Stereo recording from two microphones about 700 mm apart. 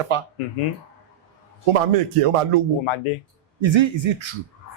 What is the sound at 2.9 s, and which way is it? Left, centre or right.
Speech, left.